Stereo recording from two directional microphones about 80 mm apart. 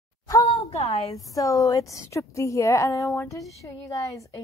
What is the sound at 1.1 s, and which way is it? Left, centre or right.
Speech, left.